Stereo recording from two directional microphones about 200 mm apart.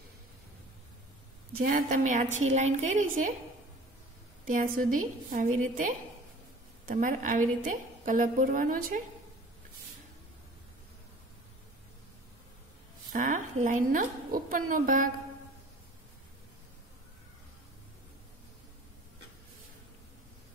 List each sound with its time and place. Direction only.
1.6 s a woman's voice: 45° right (ahead or behind)
4.5 s a woman's voice: 45° right (ahead or behind)
13.1 s a woman's voice: 40° right (ahead or behind)